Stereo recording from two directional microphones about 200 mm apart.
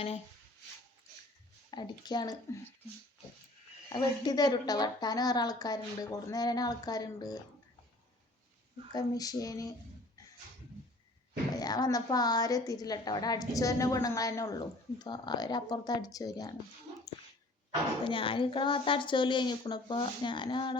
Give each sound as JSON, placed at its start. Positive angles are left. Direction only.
{"t": 1.7, "sound": "a woman's voice", "side_deg": 20}
{"t": 3.8, "sound": "a woman's voice", "side_deg": 20}
{"t": 8.9, "sound": "a woman's voice", "side_deg": 20}
{"t": 11.6, "sound": "a woman's voice", "side_deg": 20}
{"t": 18.0, "sound": "a woman's voice", "side_deg": 25}